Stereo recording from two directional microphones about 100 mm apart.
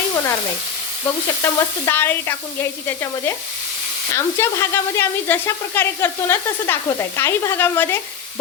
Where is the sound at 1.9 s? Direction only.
20° left (ahead or behind).